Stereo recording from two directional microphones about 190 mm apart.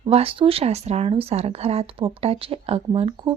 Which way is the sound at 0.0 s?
30° right (ahead or behind).